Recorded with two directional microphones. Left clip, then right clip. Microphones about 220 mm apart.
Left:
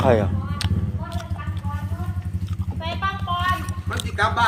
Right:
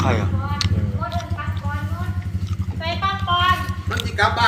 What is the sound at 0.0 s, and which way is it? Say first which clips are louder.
Speech: left 4 dB; 45° left (ahead or behind).